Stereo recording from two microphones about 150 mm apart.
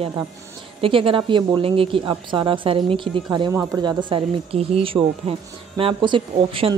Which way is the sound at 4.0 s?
35° right (ahead or behind).